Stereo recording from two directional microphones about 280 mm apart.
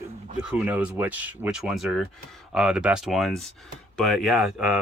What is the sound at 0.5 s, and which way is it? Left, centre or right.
Speech, centre.